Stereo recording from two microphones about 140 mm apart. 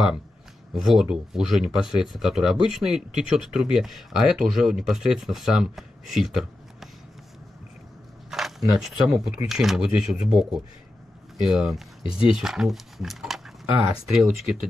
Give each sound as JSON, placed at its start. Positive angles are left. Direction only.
{"t": 0.8, "sound": "speech", "side_deg": -5}
{"t": 8.3, "sound": "a sound", "side_deg": 0}
{"t": 8.7, "sound": "speech", "side_deg": -5}
{"t": 12.0, "sound": "speech", "side_deg": 40}
{"t": 12.4, "sound": "speech", "side_deg": -5}